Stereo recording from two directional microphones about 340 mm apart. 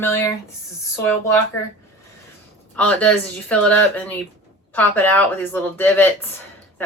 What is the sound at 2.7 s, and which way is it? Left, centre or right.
Speech, centre.